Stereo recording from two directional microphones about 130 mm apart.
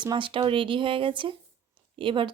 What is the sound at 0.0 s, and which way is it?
A woman's voice, 35° right (ahead or behind).